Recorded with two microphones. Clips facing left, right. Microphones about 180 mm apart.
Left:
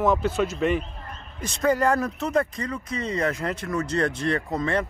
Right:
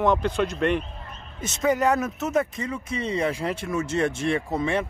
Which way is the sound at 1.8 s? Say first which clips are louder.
Even; 5° right (ahead or behind).